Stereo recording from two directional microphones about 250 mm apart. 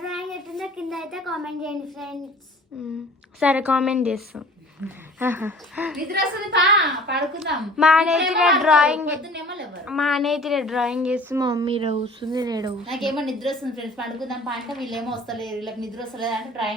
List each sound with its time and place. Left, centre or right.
0.0 s a sound: centre
3.4 s a woman's voice: centre
6.1 s a woman's voice: right
7.8 s a woman's voice: centre
9.3 s a woman's voice: right
9.8 s a woman's voice: centre
12.8 s a woman's voice: centre